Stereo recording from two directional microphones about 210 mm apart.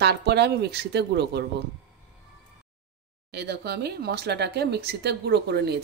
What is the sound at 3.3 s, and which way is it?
Speech, 50° right (ahead or behind).